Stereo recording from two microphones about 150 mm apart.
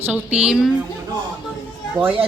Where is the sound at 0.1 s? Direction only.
10° right (ahead or behind).